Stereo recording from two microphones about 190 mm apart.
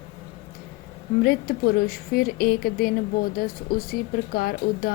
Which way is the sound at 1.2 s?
50° left (ahead or behind).